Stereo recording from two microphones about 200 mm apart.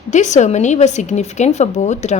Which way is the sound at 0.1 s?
35° left (ahead or behind).